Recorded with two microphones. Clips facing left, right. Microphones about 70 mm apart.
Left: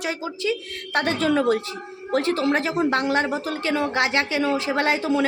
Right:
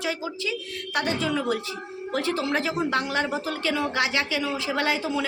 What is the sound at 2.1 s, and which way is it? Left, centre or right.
A woman's voice, left.